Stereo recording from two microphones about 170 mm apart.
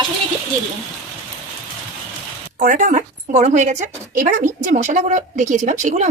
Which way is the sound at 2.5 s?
50° right (ahead or behind).